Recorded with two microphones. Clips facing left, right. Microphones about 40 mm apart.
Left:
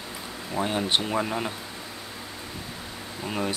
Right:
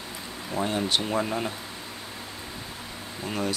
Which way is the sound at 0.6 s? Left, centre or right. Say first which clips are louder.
Left 1 dB; centre.